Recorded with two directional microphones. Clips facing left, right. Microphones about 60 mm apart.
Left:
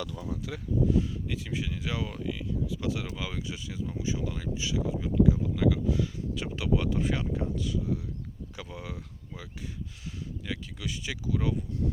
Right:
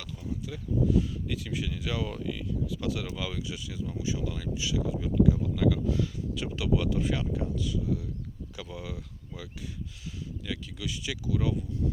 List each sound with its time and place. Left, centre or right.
0.5 s speech: left
0.9 s speech: left
2.0 s speech: centre
6.3 s speech: left
10.4 s speech: left